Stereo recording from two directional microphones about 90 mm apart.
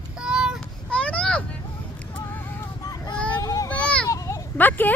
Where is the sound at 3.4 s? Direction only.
40° left (ahead or behind).